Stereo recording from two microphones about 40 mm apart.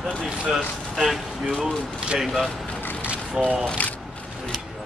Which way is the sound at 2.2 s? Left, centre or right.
Centre.